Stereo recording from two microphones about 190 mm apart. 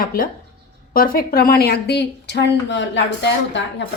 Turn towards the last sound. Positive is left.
turn(degrees=70)  # may be behind; listen again after turning